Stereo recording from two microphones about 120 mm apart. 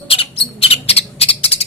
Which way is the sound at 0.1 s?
55° left (ahead or behind).